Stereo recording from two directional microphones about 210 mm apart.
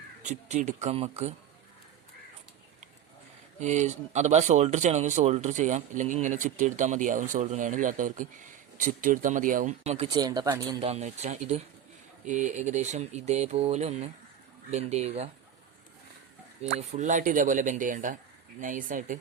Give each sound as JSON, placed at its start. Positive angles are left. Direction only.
{"t": 0.2, "sound": "speech", "side_deg": -35}
{"t": 3.6, "sound": "speech", "side_deg": -35}
{"t": 10.1, "sound": "speech", "side_deg": -20}
{"t": 16.6, "sound": "speech", "side_deg": -35}